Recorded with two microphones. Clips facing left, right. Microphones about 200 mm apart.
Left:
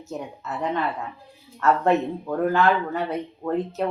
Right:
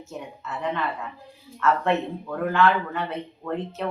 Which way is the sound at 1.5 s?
40° left (ahead or behind).